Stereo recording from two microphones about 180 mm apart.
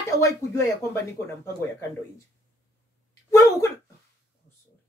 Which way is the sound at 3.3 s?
15° left (ahead or behind).